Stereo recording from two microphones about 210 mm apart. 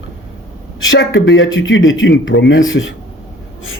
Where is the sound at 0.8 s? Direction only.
70° left (ahead or behind).